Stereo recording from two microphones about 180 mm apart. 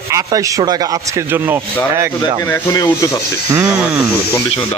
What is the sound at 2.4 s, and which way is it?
Speech, 15° left (ahead or behind).